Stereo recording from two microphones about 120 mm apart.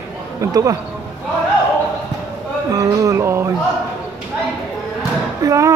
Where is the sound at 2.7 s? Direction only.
30° right (ahead or behind).